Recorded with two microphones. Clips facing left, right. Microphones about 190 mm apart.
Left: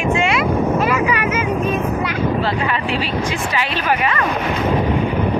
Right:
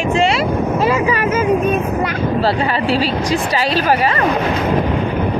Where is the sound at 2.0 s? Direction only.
35° right (ahead or behind).